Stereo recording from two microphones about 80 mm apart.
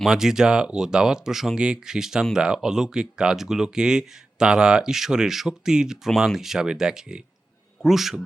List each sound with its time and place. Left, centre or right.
0.0 s speech: centre